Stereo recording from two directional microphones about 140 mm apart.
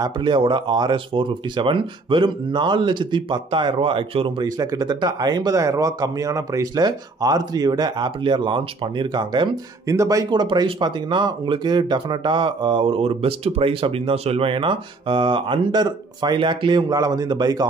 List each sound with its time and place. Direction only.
0.0 s speech: 35° right (ahead or behind)